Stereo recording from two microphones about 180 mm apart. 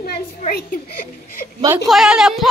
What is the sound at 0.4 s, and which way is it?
A woman's voice, 55° left (ahead or behind).